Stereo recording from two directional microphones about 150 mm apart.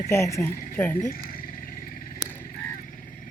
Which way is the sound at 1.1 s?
75° left (ahead or behind).